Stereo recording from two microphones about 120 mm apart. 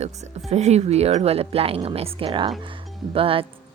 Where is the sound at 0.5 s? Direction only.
65° right (ahead or behind).